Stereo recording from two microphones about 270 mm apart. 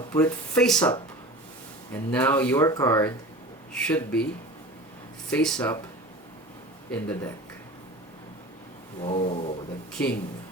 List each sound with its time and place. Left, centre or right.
0.1 s speech: centre
5.3 s speech: centre
6.9 s speech: centre
9.0 s a sound: left
9.9 s speech: centre